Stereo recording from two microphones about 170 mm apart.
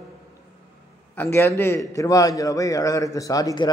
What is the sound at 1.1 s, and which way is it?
A man's voice, 15° left (ahead or behind).